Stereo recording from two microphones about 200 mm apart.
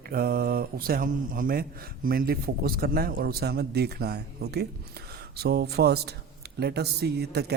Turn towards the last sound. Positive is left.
turn(degrees=-55)  # may be behind; listen again after turning